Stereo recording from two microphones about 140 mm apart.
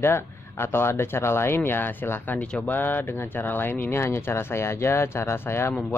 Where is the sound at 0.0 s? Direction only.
15° left (ahead or behind).